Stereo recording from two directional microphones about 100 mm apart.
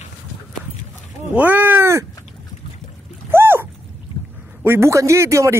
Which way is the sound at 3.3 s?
25° right (ahead or behind).